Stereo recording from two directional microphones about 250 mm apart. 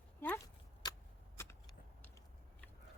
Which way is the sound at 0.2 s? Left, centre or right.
Centre.